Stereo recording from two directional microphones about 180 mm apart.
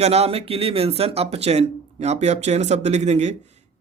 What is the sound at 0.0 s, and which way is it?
Speech, 35° right (ahead or behind).